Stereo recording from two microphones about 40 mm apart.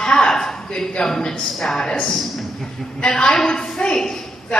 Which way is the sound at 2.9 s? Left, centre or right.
Left.